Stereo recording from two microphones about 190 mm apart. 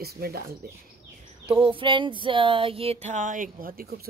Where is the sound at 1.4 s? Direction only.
30° right (ahead or behind); by 3.9 s 50° right (ahead or behind).